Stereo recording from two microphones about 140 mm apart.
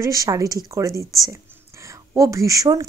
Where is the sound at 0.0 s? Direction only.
25° right (ahead or behind).